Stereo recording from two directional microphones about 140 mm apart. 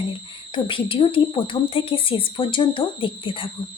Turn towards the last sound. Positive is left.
turn(degrees=40)  # may be behind; listen again after turning